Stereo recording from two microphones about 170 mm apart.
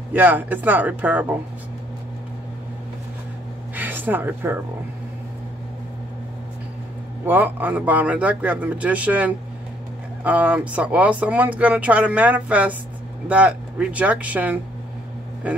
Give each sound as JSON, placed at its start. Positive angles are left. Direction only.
{"t": 0.1, "sound": "speech", "side_deg": -10}
{"t": 3.7, "sound": "a sound", "side_deg": -10}
{"t": 7.2, "sound": "speech", "side_deg": -10}